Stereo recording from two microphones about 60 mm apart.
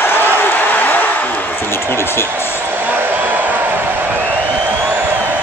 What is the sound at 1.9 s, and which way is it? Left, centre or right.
Music, left.